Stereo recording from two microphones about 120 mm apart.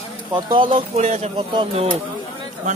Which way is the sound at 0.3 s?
40° right (ahead or behind).